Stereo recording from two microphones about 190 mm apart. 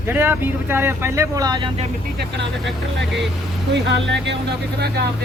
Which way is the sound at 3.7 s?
65° right (ahead or behind).